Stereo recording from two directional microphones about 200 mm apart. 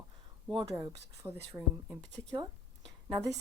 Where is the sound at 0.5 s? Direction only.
15° right (ahead or behind).